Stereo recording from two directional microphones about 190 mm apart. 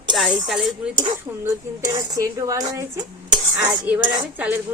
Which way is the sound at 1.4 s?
20° right (ahead or behind).